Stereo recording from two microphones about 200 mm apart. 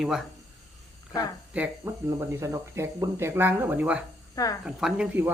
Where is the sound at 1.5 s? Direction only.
10° right (ahead or behind).